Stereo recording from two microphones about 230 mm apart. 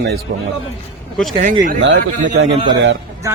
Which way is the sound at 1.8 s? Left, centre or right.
Right.